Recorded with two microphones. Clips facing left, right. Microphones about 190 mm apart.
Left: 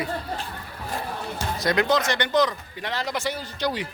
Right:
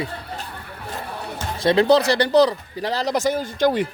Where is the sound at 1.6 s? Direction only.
30° right (ahead or behind); by 3.9 s 50° right (ahead or behind).